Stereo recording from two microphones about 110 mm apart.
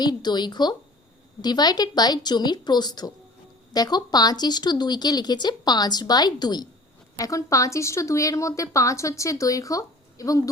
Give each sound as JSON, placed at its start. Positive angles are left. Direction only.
{"t": 0.0, "sound": "a woman's voice", "side_deg": 40}